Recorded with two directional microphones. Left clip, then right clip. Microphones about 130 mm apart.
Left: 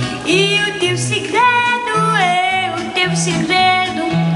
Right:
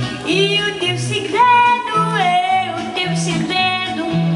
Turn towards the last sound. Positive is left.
turn(degrees=20)  # may be behind; listen again after turning